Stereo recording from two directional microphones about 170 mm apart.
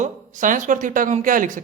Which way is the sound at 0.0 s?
50° right (ahead or behind).